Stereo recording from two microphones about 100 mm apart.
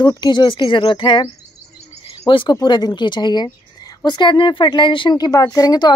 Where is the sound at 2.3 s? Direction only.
55° left (ahead or behind).